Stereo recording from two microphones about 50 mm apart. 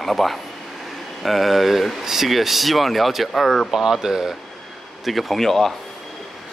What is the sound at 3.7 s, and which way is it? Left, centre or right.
Speech, centre.